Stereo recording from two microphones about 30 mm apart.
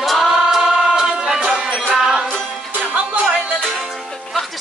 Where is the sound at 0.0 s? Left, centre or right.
Centre.